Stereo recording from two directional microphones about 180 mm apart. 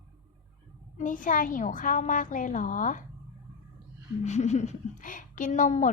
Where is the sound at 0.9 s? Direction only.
45° left (ahead or behind).